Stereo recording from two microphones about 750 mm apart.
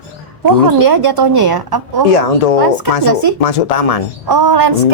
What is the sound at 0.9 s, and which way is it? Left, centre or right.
Speech, right.